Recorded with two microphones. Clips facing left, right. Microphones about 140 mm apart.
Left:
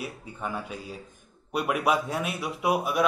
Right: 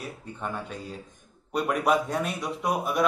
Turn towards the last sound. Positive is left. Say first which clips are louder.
# left 1 dB
turn(degrees=5)  # may be behind; listen again after turning